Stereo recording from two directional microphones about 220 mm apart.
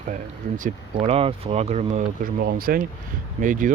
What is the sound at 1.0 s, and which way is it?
Speech, 25° right (ahead or behind).